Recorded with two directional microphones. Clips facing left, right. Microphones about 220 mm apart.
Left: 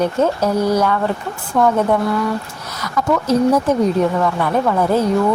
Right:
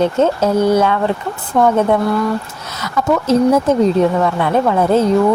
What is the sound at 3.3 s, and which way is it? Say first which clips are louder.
Speech: right 3 dB; 25° right (ahead or behind).